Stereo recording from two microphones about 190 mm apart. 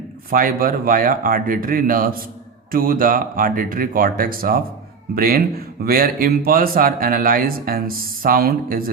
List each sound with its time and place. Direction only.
0.3 s speech: 50° right (ahead or behind)